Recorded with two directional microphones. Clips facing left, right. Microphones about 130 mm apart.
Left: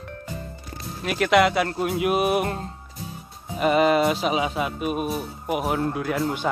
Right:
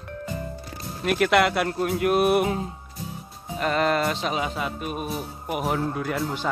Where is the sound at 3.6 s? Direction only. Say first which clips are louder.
Left 4 dB; 10° left (ahead or behind).